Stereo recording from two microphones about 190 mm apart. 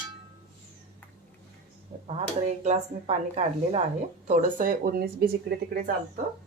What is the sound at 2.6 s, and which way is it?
A woman's voice, 35° right (ahead or behind).